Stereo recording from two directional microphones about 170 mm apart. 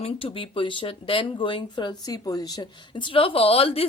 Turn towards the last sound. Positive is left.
turn(degrees=35)  # may be behind; listen again after turning